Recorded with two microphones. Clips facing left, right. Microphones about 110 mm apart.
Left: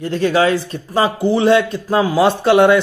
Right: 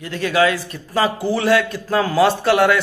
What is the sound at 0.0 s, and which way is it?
A man's voice, 30° left (ahead or behind).